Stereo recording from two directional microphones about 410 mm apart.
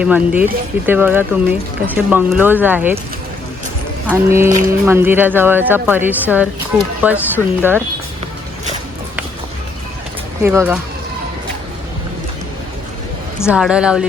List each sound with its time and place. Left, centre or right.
0.0 s speech: centre
4.0 s speech: centre
10.4 s speech: centre
13.4 s speech: centre